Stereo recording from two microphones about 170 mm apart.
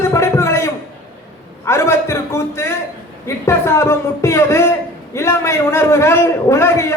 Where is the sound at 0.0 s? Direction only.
15° left (ahead or behind).